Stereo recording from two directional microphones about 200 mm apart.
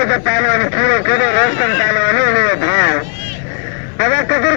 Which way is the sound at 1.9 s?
60° left (ahead or behind).